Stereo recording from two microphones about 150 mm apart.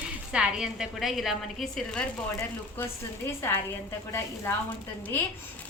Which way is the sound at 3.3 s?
15° left (ahead or behind).